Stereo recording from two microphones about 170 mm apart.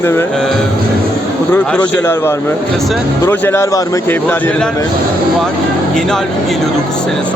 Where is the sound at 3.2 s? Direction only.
15° left (ahead or behind).